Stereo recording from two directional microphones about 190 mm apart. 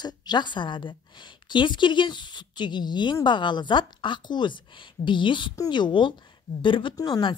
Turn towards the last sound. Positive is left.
turn(degrees=20)  # may be behind; listen again after turning